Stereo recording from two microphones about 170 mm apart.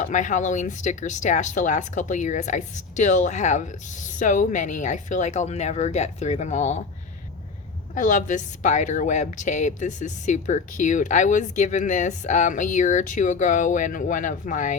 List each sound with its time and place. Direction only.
0.0 s speech: 45° left (ahead or behind)
7.9 s speech: 50° left (ahead or behind)